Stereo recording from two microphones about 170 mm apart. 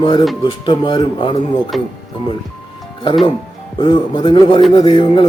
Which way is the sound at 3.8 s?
30° left (ahead or behind).